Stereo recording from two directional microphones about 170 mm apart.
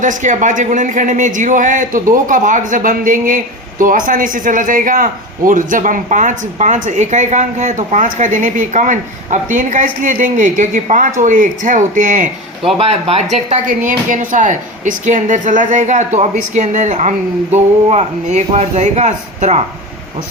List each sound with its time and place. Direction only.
0.0 s a man's voice: 50° right (ahead or behind)
12.8 s a man's voice: 35° right (ahead or behind)